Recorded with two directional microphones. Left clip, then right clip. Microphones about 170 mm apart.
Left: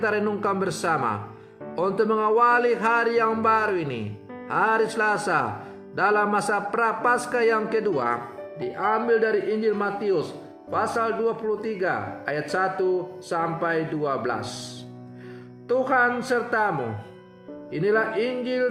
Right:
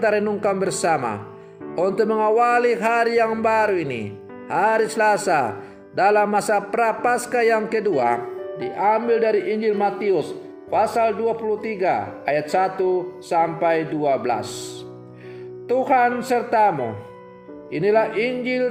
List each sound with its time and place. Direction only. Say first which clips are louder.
0.0 s a man's voice: right 4 dB; 10° right (ahead or behind)
15.7 s a man's voice: right 3 dB; 20° right (ahead or behind)